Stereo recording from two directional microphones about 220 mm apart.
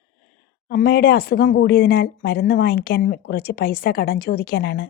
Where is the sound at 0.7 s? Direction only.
45° left (ahead or behind).